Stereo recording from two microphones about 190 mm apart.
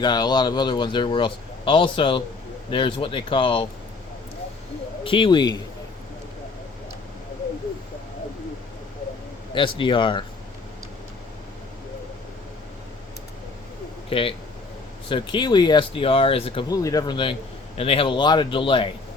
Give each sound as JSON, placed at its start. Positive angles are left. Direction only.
{"t": 0.0, "sound": "speech", "side_deg": 20}
{"t": 5.0, "sound": "speech", "side_deg": 25}
{"t": 9.6, "sound": "speech", "side_deg": 25}
{"t": 14.1, "sound": "speech", "side_deg": 30}